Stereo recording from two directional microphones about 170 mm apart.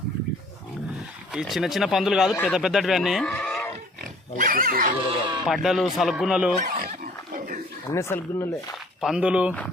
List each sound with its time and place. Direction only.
1.3 s speech: 5° right (ahead or behind)
4.4 s speech: 55° right (ahead or behind)
5.0 s speech: 30° right (ahead or behind)
5.5 s speech: centre (ahead or behind)
6.6 s dog: 60° right (ahead or behind)
7.3 s a sound: 50° right (ahead or behind)
7.9 s speech: 15° left (ahead or behind)
9.0 s speech: centre (ahead or behind)